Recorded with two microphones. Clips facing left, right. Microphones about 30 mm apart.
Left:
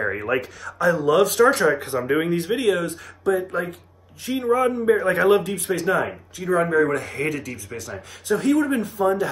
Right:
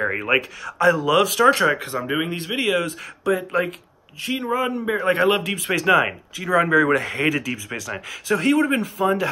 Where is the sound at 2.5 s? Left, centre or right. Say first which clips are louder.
Right 3 dB; right.